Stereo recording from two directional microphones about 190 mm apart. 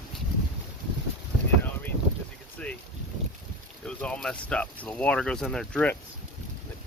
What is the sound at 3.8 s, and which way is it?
Speech, 5° left (ahead or behind).